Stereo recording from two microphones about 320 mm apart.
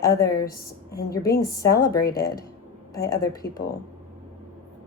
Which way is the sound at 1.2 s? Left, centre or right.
Left.